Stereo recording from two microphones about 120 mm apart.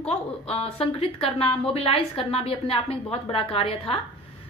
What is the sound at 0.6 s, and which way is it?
A woman's voice, 50° left (ahead or behind).